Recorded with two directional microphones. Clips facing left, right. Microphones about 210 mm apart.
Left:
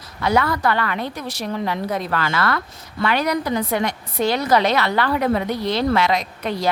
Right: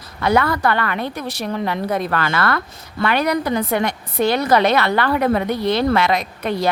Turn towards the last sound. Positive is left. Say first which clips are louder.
# right 3 dB
turn(degrees=-55)  # may be behind; listen again after turning